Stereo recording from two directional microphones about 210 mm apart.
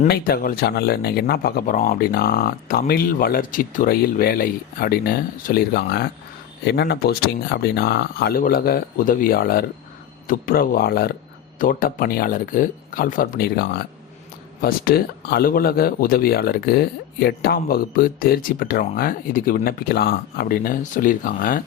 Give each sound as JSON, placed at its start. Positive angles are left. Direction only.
{"t": 0.1, "sound": "a man's voice", "side_deg": 45}